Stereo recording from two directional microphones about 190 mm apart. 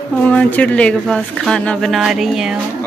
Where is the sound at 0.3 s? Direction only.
5° left (ahead or behind).